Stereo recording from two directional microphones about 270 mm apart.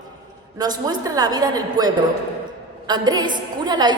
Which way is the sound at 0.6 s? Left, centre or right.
Centre.